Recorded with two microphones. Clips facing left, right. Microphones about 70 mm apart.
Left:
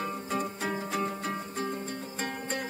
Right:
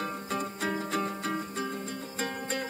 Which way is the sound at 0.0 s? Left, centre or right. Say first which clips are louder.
Left 1 dB; centre.